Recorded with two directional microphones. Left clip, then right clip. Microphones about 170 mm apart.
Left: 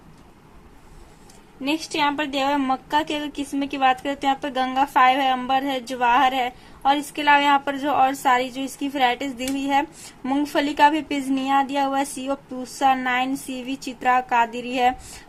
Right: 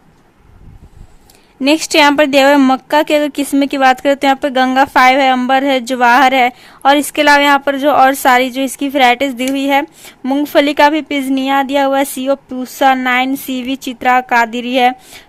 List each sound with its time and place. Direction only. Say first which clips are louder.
1.6 s a woman's voice: right 13 dB; 45° right (ahead or behind); by 14.9 s 30° right (ahead or behind)